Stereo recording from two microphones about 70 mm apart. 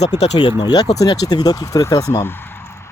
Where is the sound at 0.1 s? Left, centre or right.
Left.